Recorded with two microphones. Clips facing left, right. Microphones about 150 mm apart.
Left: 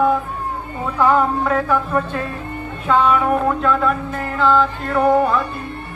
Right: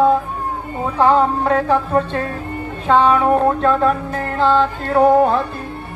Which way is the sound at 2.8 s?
30° right (ahead or behind).